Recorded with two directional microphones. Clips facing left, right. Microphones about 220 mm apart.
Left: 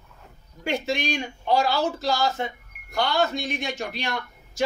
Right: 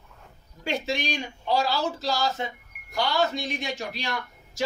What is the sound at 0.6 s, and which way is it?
A man's voice, 50° left (ahead or behind).